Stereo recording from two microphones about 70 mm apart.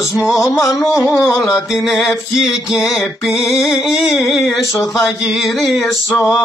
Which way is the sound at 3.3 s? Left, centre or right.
Left.